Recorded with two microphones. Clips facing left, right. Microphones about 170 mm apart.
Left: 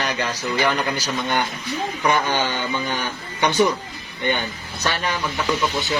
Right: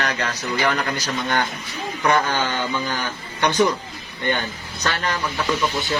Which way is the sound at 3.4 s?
10° left (ahead or behind).